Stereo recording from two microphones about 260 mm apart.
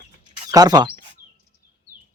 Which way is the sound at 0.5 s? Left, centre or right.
Centre.